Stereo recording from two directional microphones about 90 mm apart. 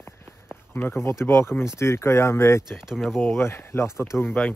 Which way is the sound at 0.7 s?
25° left (ahead or behind).